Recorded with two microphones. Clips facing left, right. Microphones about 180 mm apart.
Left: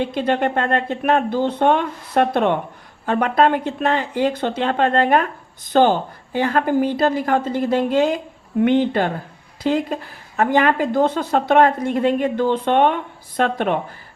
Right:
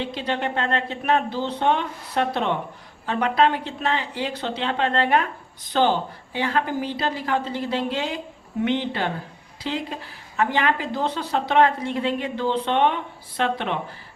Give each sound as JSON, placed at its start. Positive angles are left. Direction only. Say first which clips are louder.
{"t": 0.0, "sound": "a woman's voice", "louder": "left 7 dB", "side_deg": 50}